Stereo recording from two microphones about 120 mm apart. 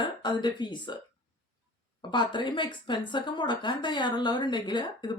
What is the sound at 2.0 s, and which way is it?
A woman's voice, 40° left (ahead or behind).